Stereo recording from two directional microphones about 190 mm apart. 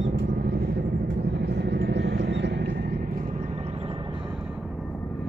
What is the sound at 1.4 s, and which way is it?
Vehicle, 60° right (ahead or behind).